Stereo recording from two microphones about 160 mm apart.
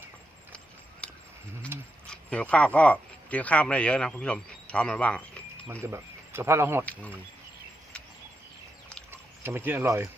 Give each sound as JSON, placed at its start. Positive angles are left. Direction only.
{"t": 1.0, "sound": "a sound", "side_deg": 5}
{"t": 1.7, "sound": "speech", "side_deg": -15}
{"t": 2.0, "sound": "speech", "side_deg": 5}
{"t": 5.8, "sound": "speech", "side_deg": -15}
{"t": 6.8, "sound": "speech", "side_deg": 10}
{"t": 9.4, "sound": "speech", "side_deg": -15}